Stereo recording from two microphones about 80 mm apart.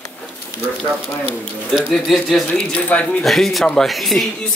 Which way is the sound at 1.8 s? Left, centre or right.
Centre.